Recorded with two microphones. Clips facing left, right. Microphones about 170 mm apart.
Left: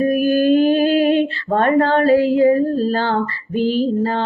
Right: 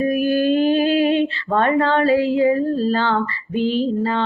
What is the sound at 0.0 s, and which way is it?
Music, 45° left (ahead or behind).